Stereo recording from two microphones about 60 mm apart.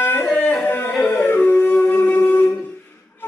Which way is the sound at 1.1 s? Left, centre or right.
Left.